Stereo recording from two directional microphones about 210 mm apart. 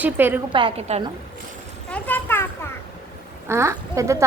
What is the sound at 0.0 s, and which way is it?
Speech, 10° right (ahead or behind).